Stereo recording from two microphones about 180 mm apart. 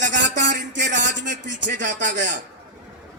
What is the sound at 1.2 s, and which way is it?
Speech, 80° right.